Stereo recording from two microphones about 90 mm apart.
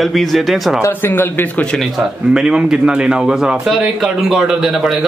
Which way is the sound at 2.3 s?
10° right (ahead or behind).